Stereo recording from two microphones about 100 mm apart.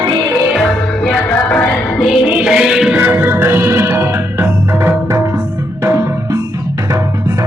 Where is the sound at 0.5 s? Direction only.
5° left (ahead or behind).